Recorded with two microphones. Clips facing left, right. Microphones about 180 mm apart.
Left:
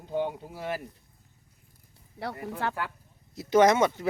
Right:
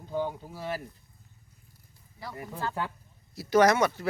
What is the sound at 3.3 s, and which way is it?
Speech, 20° left (ahead or behind).